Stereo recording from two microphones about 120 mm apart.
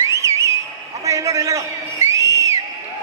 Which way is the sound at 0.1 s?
25° right (ahead or behind).